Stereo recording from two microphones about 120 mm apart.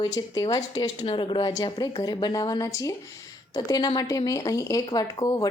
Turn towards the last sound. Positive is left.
turn(degrees=30)  # may be behind; listen again after turning